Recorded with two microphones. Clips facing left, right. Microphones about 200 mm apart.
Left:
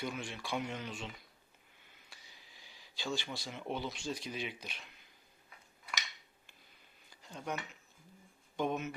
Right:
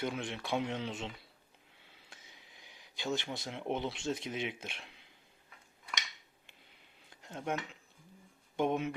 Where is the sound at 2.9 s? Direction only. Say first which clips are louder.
Right 3 dB; 20° right (ahead or behind).